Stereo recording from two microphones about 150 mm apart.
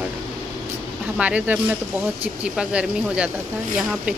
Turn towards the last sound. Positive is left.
turn(degrees=-5)  # may be behind; listen again after turning